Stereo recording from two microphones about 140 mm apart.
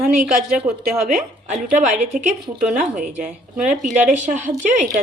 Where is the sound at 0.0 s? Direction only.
5° right (ahead or behind).